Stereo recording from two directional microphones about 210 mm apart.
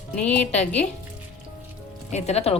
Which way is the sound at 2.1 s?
30° left (ahead or behind).